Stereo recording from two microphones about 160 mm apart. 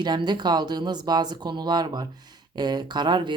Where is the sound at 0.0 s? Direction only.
25° right (ahead or behind).